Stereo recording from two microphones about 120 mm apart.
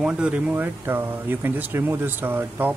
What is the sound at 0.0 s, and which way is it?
Speech, 10° right (ahead or behind).